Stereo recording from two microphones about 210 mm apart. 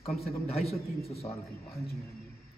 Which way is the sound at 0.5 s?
30° left (ahead or behind).